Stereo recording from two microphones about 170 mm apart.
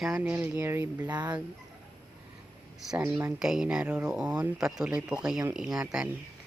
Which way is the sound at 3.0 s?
15° right (ahead or behind).